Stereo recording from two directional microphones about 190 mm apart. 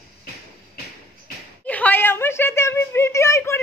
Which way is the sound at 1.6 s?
10° left (ahead or behind).